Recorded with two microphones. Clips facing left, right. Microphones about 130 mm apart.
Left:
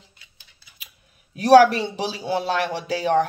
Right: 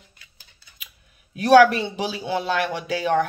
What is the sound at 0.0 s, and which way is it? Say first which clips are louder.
Scissors: even; 25° left (ahead or behind).